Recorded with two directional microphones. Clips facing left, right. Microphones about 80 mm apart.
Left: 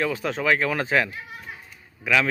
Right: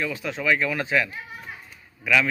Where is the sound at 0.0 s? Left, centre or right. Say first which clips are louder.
Left 3 dB; left.